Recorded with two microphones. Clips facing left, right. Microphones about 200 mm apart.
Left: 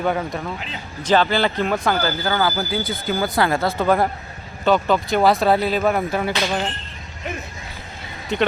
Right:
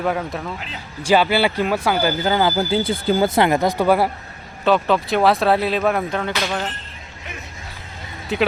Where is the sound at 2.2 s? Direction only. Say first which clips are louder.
Right 3 dB; 20° right (ahead or behind).